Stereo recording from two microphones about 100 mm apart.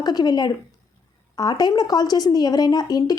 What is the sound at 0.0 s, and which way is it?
A woman's voice, 40° left (ahead or behind).